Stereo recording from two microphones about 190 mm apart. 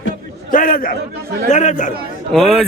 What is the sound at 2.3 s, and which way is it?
Speech, centre (ahead or behind).